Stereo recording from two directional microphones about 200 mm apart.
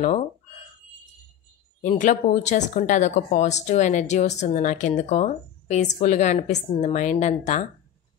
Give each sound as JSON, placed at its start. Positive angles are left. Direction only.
{"t": 1.8, "sound": "speech", "side_deg": 40}